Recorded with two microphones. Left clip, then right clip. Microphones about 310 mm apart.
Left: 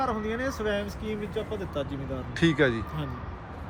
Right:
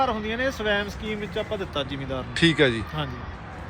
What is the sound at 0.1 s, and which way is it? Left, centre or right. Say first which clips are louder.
Speech: right 4 dB; centre.